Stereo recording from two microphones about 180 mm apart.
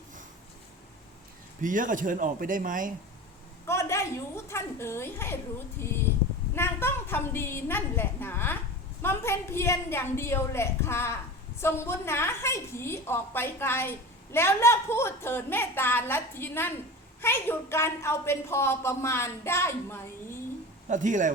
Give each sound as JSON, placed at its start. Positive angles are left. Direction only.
{"t": 1.6, "sound": "a man's voice", "side_deg": -45}
{"t": 3.7, "sound": "a woman's voice", "side_deg": 15}
{"t": 6.6, "sound": "a woman's voice", "side_deg": 15}
{"t": 20.9, "sound": "a man's voice", "side_deg": -45}